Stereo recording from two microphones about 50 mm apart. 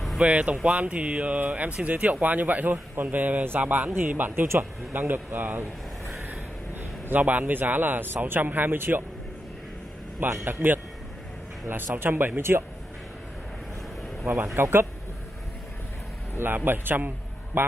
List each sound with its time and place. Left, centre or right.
0.2 s speech: right
4.5 s speech: right
5.0 s a man's voice: right
10.4 s speech: right
14.2 s speech: right
16.3 s speech: right